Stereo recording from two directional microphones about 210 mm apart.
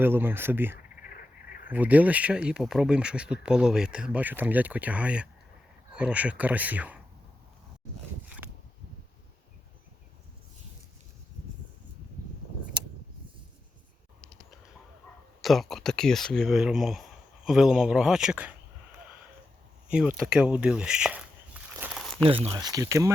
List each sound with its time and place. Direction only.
0.0 s speech: 10° right (ahead or behind)
0.8 s frog: 45° left (ahead or behind)
1.7 s speech: 5° right (ahead or behind)
15.4 s speech: centre (ahead or behind)
19.9 s a sound: 5° right (ahead or behind)
22.3 s speech: 25° right (ahead or behind)